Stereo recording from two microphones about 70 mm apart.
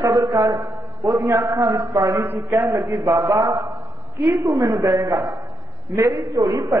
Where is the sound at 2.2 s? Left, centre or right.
Right.